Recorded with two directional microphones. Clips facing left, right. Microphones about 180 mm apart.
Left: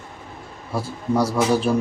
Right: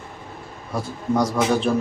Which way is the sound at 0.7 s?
5° left (ahead or behind).